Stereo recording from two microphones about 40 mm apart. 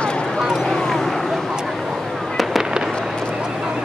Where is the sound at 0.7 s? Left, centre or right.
Centre.